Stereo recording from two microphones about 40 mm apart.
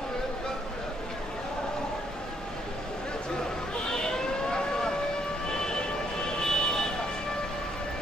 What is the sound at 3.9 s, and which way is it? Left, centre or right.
Vehicle, centre.